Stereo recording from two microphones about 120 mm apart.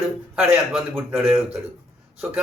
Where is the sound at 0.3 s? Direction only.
10° right (ahead or behind).